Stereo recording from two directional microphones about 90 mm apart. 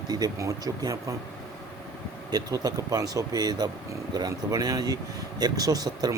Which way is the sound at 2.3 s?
45° right (ahead or behind).